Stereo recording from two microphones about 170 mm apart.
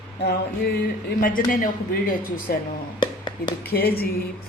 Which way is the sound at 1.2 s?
55° left (ahead or behind).